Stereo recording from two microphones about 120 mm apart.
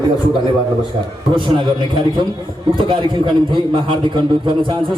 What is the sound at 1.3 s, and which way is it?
Speech, 40° right (ahead or behind).